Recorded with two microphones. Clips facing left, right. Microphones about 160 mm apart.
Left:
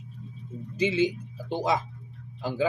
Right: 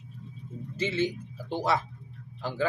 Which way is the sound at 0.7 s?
15° left (ahead or behind).